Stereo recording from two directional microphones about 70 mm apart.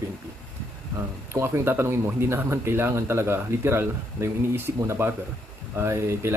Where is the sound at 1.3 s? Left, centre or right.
Right.